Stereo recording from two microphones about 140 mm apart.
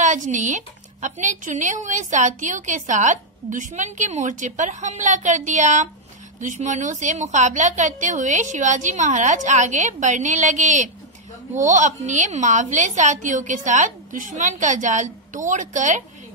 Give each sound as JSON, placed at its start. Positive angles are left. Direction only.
{"t": 0.0, "sound": "a woman's voice", "side_deg": -60}